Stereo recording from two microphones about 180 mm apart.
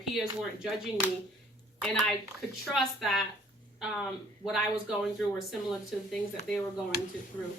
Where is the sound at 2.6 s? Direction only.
Centre (ahead or behind).